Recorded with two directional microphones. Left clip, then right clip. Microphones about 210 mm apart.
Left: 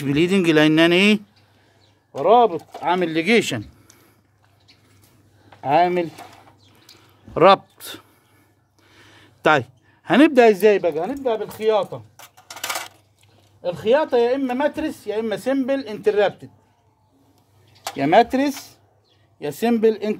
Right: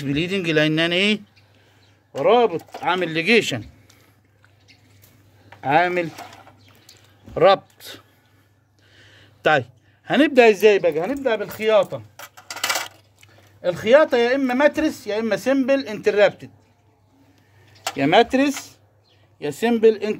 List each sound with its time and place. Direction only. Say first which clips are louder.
0.0 s speech: left 5 dB; 55° left (ahead or behind)
2.1 s speech: left 2 dB; 10° left (ahead or behind); by 3.6 s 35° left (ahead or behind)
5.6 s speech: left 1 dB; 15° left (ahead or behind)
7.3 s speech: left 2 dB; 50° left (ahead or behind)
8.9 s a sound: left 1 dB; 45° left (ahead or behind)
10.4 s speech: even; 25° left (ahead or behind)
11.1 s speech: right 1 dB; centre (ahead or behind)
12.2 s coin: right 5 dB; 25° right (ahead or behind)
13.7 s speech: right 3 dB; 10° right (ahead or behind)
17.9 s speech: even; 20° left (ahead or behind)